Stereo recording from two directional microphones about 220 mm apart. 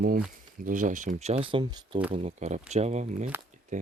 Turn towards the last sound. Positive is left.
turn(degrees=-35)  # may be behind; listen again after turning